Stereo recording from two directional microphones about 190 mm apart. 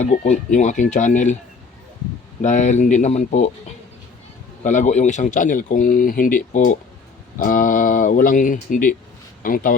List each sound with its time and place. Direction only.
0.0 s speech: 35° left (ahead or behind)
2.4 s speech: 40° left (ahead or behind)
4.6 s speech: 40° left (ahead or behind)